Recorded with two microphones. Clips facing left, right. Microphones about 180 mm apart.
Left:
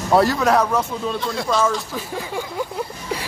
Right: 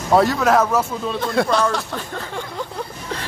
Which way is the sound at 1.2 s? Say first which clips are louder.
Right 6 dB; 60° right (ahead or behind).